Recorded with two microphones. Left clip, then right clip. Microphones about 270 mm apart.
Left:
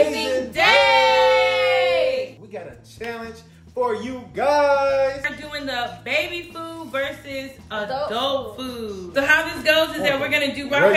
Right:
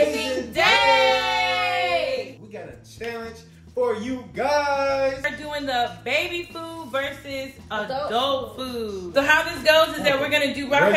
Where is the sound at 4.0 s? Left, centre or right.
Centre.